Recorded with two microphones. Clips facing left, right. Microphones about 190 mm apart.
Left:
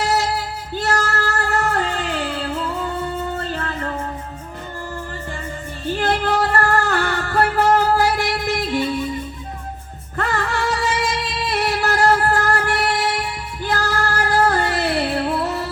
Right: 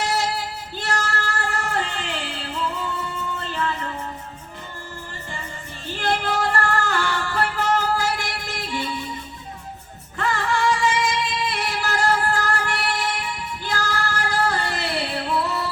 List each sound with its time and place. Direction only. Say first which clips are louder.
0.8 s music: left 5 dB; 40° left (ahead or behind)
1.6 s music: left 5 dB; 55° left (ahead or behind)
3.3 s music: left 2 dB; 45° left (ahead or behind)
6.0 s music: left 3 dB; 50° left (ahead or behind)
10.2 s music: left 1 dB; 55° left (ahead or behind)